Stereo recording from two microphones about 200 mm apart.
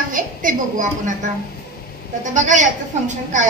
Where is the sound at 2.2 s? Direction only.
40° right (ahead or behind).